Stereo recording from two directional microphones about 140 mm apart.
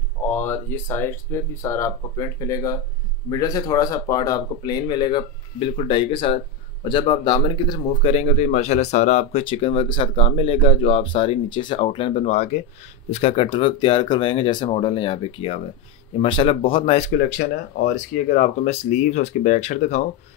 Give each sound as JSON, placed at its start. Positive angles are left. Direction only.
{"t": 0.2, "sound": "speech", "side_deg": 15}
{"t": 8.0, "sound": "speech", "side_deg": 50}
{"t": 18.3, "sound": "speech", "side_deg": 55}